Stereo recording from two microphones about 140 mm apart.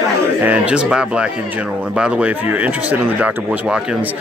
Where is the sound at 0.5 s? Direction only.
10° right (ahead or behind).